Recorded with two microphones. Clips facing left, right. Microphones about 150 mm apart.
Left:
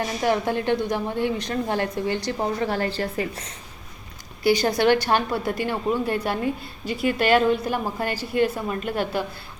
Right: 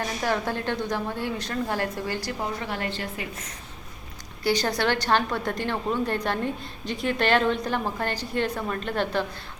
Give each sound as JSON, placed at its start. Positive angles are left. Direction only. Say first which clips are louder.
{"t": 0.2, "sound": "a woman's voice", "louder": "left 5 dB", "side_deg": 15}
{"t": 2.4, "sound": "a woman's voice", "louder": "left 6 dB", "side_deg": 35}
{"t": 4.4, "sound": "a woman's voice", "louder": "left 5 dB", "side_deg": 15}